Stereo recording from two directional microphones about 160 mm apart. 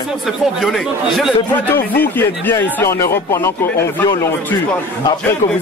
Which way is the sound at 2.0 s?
10° left (ahead or behind).